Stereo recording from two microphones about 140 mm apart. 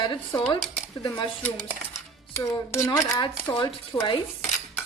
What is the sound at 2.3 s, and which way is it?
Speech, 20° left (ahead or behind).